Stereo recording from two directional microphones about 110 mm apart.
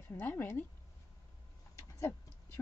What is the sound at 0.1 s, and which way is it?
Speech, 20° left (ahead or behind).